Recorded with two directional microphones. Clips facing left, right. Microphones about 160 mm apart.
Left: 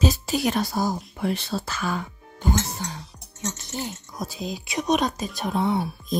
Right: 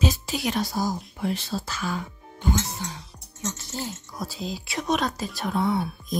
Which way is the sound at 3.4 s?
20° left (ahead or behind).